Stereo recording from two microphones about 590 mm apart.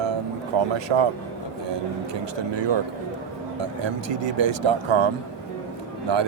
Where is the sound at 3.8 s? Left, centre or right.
Right.